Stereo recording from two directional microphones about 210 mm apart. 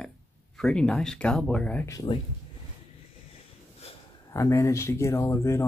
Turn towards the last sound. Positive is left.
turn(degrees=10)  # may be behind; listen again after turning